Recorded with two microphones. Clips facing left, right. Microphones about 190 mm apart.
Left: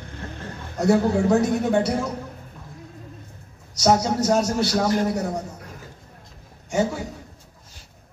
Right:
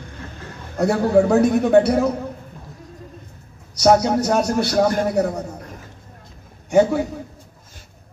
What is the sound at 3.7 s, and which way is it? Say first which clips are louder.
Speech: right 5 dB; 60° right (ahead or behind).